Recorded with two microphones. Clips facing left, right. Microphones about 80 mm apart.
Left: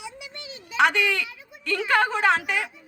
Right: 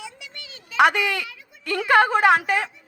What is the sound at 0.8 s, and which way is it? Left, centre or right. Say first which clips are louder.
A woman's voice: right 3 dB; right.